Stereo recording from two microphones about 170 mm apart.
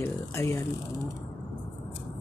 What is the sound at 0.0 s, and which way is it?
Speech, 15° left (ahead or behind).